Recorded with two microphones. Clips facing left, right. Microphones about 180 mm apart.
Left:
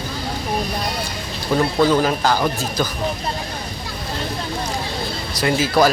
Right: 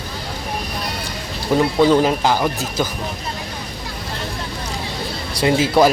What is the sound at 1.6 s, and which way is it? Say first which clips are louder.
Speech: right 2 dB; 20° right (ahead or behind).